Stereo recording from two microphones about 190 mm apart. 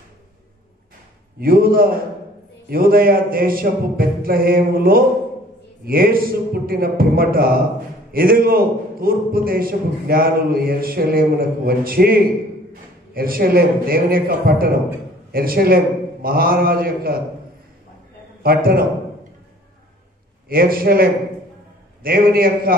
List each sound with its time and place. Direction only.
1.4 s a man's voice: 50° right (ahead or behind)
18.4 s a man's voice: 50° right (ahead or behind)
20.4 s a man's voice: 50° right (ahead or behind)